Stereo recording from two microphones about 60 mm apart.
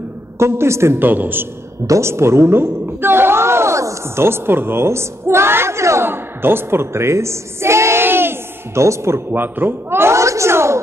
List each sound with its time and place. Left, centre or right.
0.4 s a woman's voice: right
0.9 s a woman's voice: right
1.9 s a woman's voice: right
6.0 s a sound: right
8.8 s a woman's voice: right
9.3 s a woman's voice: right